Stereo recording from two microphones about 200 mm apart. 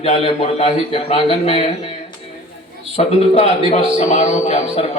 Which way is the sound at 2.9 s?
30° left (ahead or behind).